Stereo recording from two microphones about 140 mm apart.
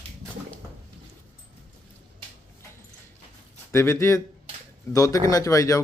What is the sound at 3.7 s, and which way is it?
Speech, 20° left (ahead or behind).